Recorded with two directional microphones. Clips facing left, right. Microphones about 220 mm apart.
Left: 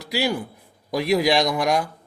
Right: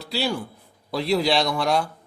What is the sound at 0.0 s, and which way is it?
A man's voice, 15° left (ahead or behind).